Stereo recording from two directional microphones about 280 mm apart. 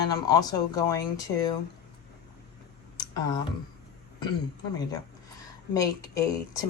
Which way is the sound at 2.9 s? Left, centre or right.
Centre.